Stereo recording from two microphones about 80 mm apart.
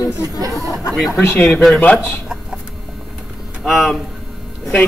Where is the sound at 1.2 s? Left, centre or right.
Left.